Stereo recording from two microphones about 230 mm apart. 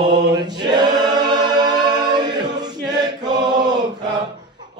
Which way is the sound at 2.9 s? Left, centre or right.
Centre.